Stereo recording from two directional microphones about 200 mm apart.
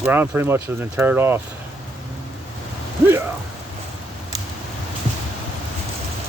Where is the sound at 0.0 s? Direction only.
10° right (ahead or behind).